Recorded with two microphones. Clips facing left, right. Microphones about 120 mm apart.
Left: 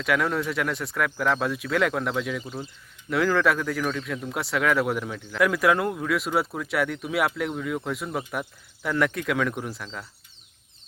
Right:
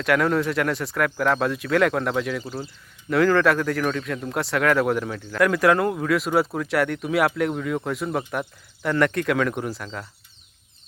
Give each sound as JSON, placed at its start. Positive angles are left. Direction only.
{"t": 0.0, "sound": "speech", "side_deg": 0}